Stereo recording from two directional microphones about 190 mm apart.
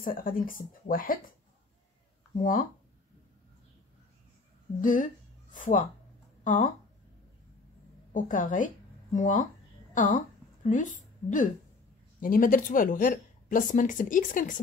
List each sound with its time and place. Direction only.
0.0 s a woman's voice: 45° left (ahead or behind)
4.8 s speech: 45° left (ahead or behind)
8.1 s a woman's voice: 45° left (ahead or behind)